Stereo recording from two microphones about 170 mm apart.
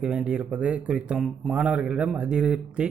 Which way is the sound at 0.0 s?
5° right (ahead or behind).